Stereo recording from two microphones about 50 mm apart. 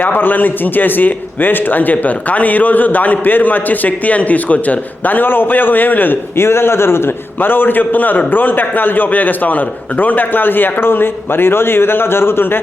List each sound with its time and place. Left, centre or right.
0.0 s a man's voice: left
6.3 s a man's voice: left
7.3 s a man's voice: left